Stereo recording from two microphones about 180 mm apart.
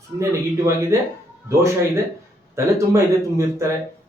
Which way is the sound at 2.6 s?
15° right (ahead or behind).